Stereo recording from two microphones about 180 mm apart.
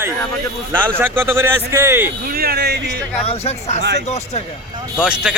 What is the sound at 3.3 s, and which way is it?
Speech, 35° left (ahead or behind).